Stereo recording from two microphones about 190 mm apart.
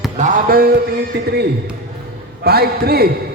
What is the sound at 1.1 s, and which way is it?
Speech, 60° right (ahead or behind).